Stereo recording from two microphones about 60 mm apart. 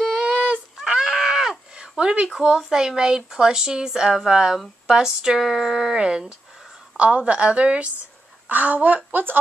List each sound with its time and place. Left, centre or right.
0.0 s fowl: right
0.7 s fowl: centre
2.3 s a woman's voice: centre; by 9.4 s right